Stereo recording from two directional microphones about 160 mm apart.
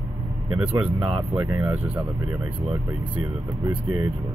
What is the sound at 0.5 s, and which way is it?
Speech, 5° right (ahead or behind).